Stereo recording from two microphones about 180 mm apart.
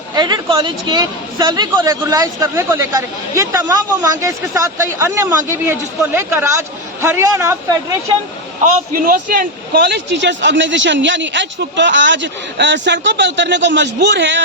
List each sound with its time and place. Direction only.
0.1 s a man's voice: 25° right (ahead or behind)
8.9 s a man's voice: 50° right (ahead or behind); by 14.4 s 75° right (ahead or behind)